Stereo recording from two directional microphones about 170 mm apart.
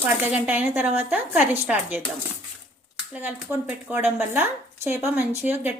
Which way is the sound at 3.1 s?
10° right (ahead or behind).